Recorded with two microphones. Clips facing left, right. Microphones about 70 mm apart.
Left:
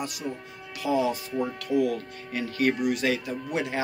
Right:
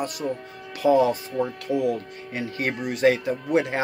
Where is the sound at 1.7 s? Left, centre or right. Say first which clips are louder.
Left 1 dB; right.